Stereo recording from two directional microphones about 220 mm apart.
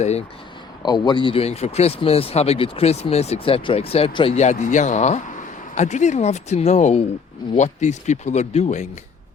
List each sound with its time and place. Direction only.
0.0 s speech: 30° left (ahead or behind)
0.8 s speech: 20° left (ahead or behind)